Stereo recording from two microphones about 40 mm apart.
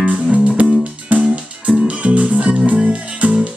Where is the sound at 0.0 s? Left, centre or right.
Right.